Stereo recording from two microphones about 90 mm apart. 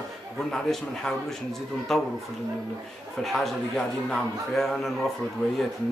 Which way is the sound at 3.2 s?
5° left (ahead or behind).